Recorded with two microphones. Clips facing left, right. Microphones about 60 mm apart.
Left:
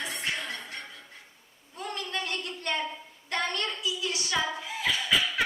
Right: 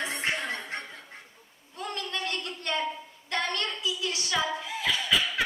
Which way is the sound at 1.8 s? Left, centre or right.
Left.